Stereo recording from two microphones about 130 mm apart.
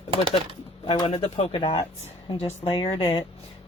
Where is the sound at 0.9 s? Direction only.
40° left (ahead or behind).